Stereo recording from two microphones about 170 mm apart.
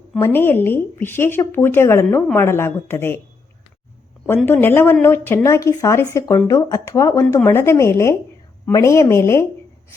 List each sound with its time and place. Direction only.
0.2 s speech: 10° left (ahead or behind)
4.4 s speech: 10° left (ahead or behind)